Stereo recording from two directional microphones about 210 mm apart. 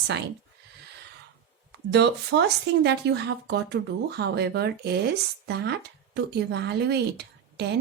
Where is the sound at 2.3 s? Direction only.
65° right (ahead or behind).